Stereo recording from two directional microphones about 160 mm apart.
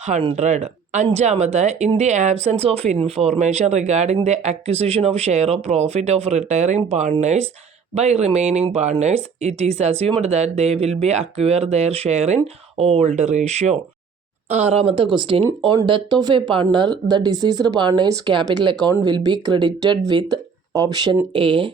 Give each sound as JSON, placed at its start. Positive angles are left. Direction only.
{"t": 0.0, "sound": "speech", "side_deg": -40}